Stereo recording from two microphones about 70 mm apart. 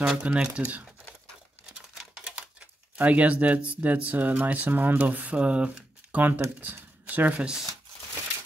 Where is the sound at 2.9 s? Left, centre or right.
Right.